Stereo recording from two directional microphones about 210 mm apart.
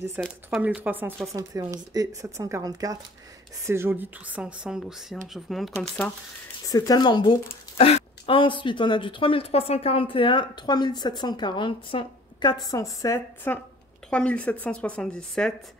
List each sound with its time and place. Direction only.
0.2 s a woman's voice: 5° right (ahead or behind)
6.7 s a woman's voice: 20° left (ahead or behind); by 15.5 s 5° left (ahead or behind)